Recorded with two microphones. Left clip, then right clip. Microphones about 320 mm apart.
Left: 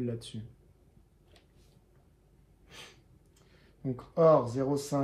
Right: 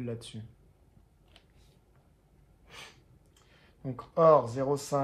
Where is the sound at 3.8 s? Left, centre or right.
Right.